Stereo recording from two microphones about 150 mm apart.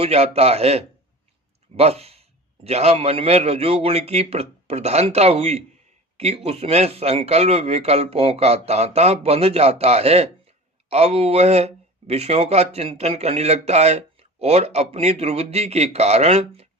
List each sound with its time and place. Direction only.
0.0 s speech: 45° right (ahead or behind)